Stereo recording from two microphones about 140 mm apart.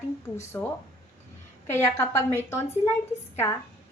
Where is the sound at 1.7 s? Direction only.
20° left (ahead or behind).